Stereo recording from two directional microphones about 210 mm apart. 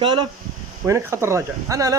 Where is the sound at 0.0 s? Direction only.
25° right (ahead or behind).